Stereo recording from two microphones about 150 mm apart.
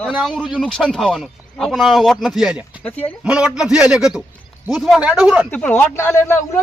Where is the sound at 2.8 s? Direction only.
10° left (ahead or behind).